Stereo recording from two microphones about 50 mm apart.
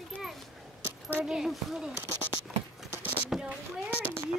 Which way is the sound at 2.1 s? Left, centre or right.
Left.